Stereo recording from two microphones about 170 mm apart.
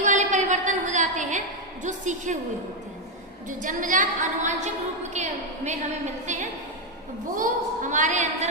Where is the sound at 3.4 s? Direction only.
50° right (ahead or behind).